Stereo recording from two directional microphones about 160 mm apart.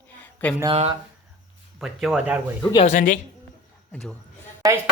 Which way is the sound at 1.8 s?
5° right (ahead or behind).